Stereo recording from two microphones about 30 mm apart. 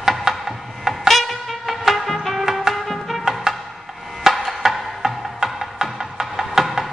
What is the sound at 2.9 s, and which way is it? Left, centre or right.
Music, centre.